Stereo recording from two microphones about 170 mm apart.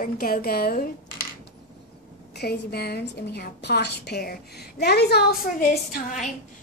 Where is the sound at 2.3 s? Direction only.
70° left (ahead or behind).